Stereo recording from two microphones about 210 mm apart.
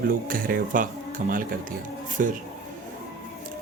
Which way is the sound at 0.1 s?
40° right (ahead or behind).